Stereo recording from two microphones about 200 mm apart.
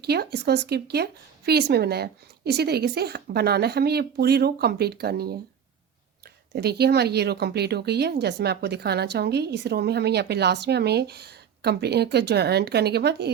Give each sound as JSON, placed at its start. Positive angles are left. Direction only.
{"t": 0.0, "sound": "speech", "side_deg": -55}
{"t": 6.5, "sound": "a woman's voice", "side_deg": -55}